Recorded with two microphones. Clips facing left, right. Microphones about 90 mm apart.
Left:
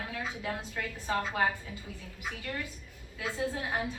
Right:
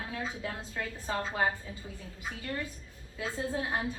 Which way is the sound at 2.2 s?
25° right (ahead or behind).